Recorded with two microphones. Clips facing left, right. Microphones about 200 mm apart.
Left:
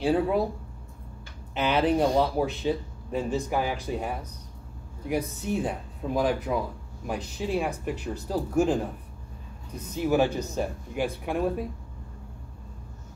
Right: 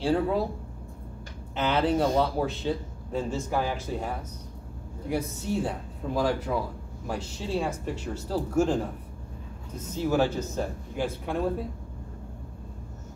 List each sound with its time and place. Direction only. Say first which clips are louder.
0.0 s a man's voice: left 1 dB; 15° left (ahead or behind)
1.5 s a man's voice: left 1 dB; 15° left (ahead or behind)
9.9 s a man's voice: left 1 dB; 15° left (ahead or behind)